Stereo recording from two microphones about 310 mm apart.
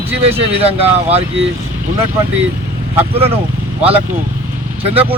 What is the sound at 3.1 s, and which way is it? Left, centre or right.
Speech, centre.